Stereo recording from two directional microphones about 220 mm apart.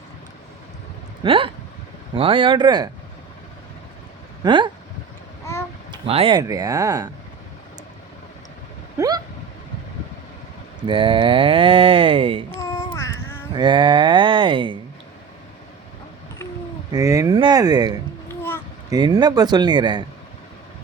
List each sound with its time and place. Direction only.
1.2 s speech: 25° right (ahead or behind)
4.4 s speech: 20° right (ahead or behind)
5.9 s speech: 25° right (ahead or behind)
9.0 s vehicle: 15° right (ahead or behind)
10.8 s speech: 20° right (ahead or behind)
12.5 s a sound: 15° left (ahead or behind)
13.5 s speech: 20° right (ahead or behind)
16.9 s speech: 15° right (ahead or behind)